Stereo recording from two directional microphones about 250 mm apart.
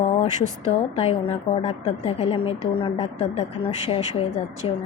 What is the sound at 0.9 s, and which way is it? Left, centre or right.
A woman's voice, left.